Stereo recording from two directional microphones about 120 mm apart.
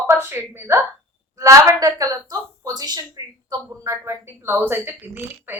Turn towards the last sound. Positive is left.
turn(degrees=-15)  # may be behind; listen again after turning